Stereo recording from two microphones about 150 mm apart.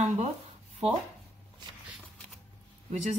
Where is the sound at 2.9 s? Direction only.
50° right (ahead or behind).